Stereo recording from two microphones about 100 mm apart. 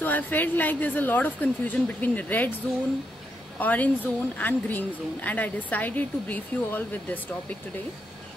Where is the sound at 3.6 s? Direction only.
15° left (ahead or behind).